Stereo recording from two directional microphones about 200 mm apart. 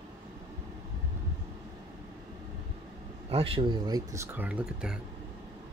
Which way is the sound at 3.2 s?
30° right (ahead or behind).